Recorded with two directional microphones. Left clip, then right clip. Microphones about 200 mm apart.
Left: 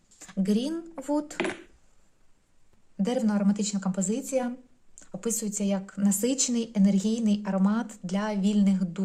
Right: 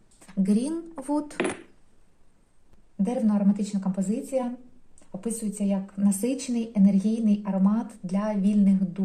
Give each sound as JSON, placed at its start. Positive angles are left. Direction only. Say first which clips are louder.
{"t": 0.3, "sound": "speech", "louder": "right 1 dB", "side_deg": 20}
{"t": 3.0, "sound": "speech", "louder": "right 1 dB", "side_deg": 35}